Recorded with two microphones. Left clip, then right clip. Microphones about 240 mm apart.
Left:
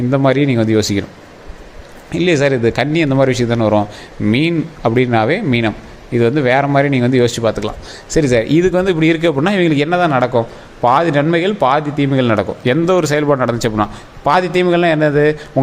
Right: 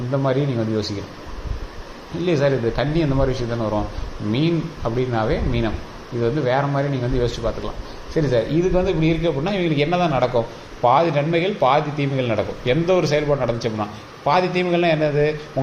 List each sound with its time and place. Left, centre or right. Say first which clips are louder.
0.1 s a man's voice: left 7 dB; left
2.2 s a man's voice: left 6 dB; left